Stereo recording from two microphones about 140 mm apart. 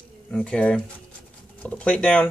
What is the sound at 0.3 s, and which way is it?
Speech, 5° left (ahead or behind).